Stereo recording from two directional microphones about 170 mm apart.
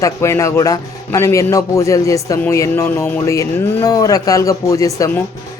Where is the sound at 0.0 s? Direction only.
15° left (ahead or behind).